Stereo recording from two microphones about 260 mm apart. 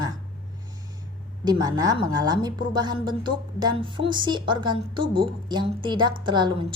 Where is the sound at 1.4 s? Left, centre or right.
Centre.